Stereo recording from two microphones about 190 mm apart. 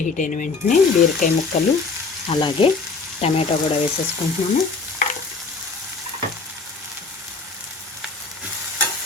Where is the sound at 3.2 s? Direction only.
30° left (ahead or behind).